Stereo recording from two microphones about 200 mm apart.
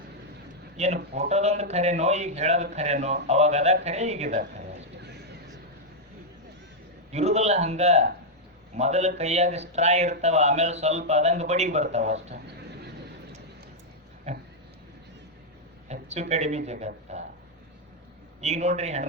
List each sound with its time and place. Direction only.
0.8 s speech: 35° right (ahead or behind)
7.1 s speech: 35° right (ahead or behind)
15.9 s a sound: 35° right (ahead or behind)
16.3 s speech: 35° right (ahead or behind)
18.3 s speech: 35° right (ahead or behind)